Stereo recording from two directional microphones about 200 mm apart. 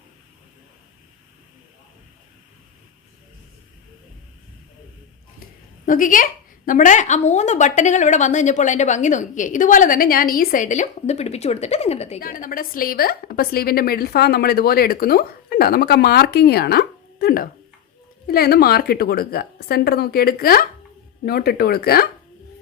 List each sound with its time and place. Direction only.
5.8 s a woman's voice: 40° left (ahead or behind)
12.2 s a woman's voice: 45° left (ahead or behind)